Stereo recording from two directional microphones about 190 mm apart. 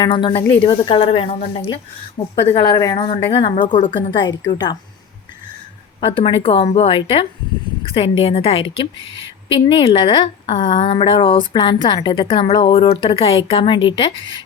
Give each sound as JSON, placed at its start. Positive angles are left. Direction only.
{"t": 0.0, "sound": "a woman's voice", "side_deg": 25}
{"t": 3.7, "sound": "a woman's voice", "side_deg": 40}
{"t": 3.9, "sound": "a woman's voice", "side_deg": 25}
{"t": 6.0, "sound": "a woman's voice", "side_deg": 30}